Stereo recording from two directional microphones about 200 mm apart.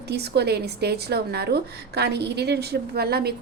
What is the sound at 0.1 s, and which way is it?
A woman's voice, 55° right (ahead or behind).